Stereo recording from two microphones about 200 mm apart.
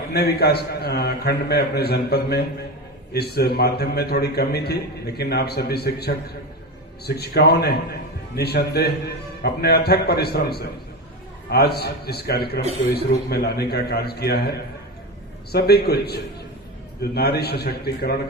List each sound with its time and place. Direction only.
0.1 s a man's voice: 55° left (ahead or behind)
15.5 s a man's voice: 50° left (ahead or behind)